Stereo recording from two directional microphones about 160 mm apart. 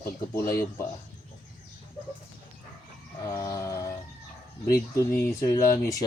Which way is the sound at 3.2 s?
20° left (ahead or behind).